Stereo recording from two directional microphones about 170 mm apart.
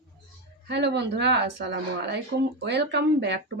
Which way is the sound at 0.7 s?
90° right.